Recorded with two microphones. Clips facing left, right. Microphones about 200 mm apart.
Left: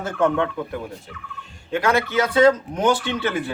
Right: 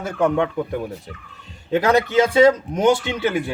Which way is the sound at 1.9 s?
15° right (ahead or behind).